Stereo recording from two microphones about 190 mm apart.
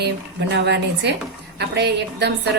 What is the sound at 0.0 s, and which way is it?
A woman's voice, 60° right (ahead or behind).